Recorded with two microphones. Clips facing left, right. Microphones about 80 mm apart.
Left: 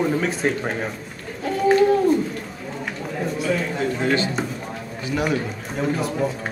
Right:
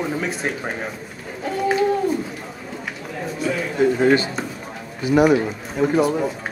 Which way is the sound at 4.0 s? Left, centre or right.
Centre.